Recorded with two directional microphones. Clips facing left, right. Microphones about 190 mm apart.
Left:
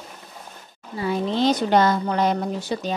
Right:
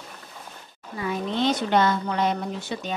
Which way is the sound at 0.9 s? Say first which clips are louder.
Left 4 dB; 30° left (ahead or behind).